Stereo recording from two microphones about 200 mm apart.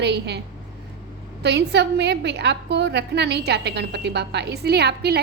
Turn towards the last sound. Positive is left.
turn(degrees=-55)  # may be behind; listen again after turning